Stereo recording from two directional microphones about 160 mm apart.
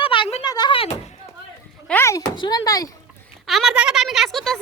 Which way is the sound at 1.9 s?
15° left (ahead or behind).